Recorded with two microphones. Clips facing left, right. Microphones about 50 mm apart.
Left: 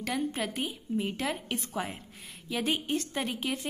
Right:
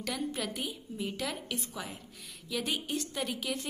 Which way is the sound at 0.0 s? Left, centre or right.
Left.